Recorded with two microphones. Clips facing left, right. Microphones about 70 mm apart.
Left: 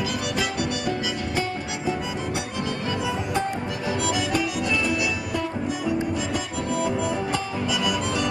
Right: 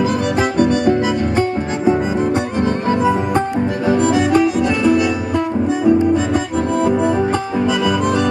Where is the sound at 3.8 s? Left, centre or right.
Right.